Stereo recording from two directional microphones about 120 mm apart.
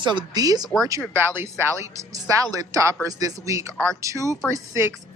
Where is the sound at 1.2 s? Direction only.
20° right (ahead or behind).